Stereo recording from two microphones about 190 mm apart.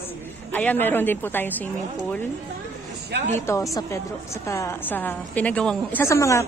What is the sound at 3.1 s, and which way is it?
Speech, 60° right (ahead or behind).